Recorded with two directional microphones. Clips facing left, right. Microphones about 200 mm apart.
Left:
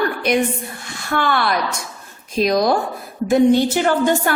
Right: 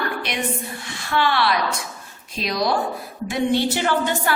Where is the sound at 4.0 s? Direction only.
45° left (ahead or behind).